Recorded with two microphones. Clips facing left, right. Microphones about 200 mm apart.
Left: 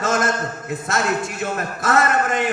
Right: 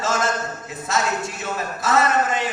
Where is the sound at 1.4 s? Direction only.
55° left (ahead or behind).